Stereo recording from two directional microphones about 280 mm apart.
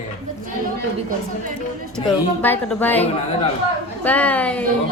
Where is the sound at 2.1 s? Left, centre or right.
Centre.